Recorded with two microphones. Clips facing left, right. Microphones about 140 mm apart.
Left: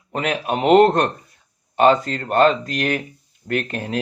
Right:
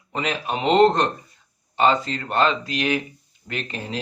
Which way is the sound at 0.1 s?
55° left (ahead or behind).